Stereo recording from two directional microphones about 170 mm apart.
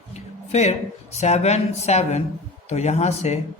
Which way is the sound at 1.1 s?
40° left (ahead or behind).